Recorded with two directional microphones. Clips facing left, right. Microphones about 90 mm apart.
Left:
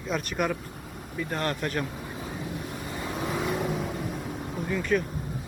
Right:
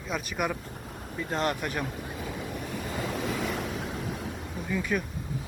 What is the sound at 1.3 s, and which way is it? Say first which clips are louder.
Speech: right 1 dB; 20° right (ahead or behind).